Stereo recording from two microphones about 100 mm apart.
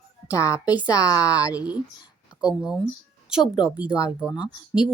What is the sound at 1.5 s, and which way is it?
Speech, 10° right (ahead or behind).